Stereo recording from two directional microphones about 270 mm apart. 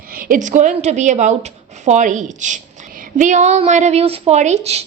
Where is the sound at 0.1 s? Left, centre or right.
Right.